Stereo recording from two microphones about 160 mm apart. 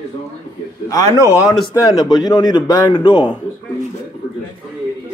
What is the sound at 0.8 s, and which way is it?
A man's voice, 20° left (ahead or behind).